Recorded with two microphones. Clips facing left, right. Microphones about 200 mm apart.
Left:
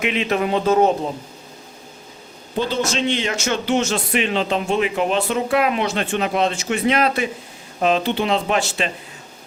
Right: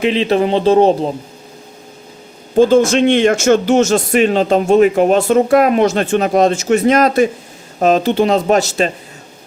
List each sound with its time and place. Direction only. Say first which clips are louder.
0.0 s speech: right 7 dB; 30° right (ahead or behind)
2.6 s speech: right 12 dB; 50° right (ahead or behind)